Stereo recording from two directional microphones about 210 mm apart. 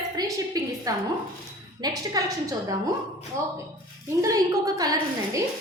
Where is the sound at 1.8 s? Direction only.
15° right (ahead or behind).